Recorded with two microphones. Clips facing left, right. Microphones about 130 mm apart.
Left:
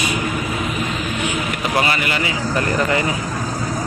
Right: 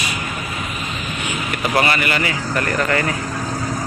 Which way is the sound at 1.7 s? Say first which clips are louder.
Right 2 dB; 15° left (ahead or behind).